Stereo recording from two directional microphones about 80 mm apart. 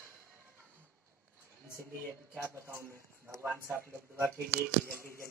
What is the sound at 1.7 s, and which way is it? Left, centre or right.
Speech, right.